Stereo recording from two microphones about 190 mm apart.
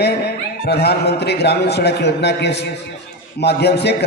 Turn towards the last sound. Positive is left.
turn(degrees=60)  # may be behind; listen again after turning